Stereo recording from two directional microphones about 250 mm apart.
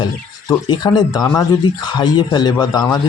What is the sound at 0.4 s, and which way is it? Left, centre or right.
Speech, centre.